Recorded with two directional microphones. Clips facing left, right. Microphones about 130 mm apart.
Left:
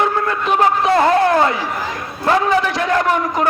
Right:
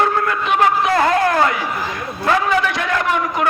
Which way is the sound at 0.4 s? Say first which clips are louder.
Left 2 dB; 35° left (ahead or behind).